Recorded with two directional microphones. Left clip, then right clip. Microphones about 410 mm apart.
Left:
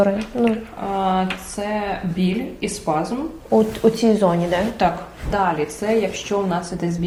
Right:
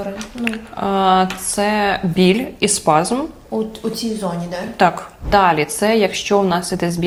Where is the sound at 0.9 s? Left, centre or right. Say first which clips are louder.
Right 6 dB; right.